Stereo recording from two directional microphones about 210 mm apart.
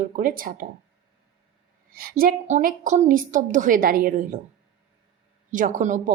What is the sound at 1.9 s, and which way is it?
A woman's voice, 45° right (ahead or behind).